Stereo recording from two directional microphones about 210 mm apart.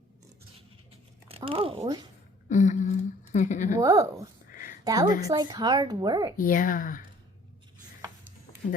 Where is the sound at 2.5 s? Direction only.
35° left (ahead or behind).